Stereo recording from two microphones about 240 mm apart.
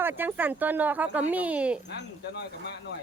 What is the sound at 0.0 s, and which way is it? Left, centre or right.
Speech, centre.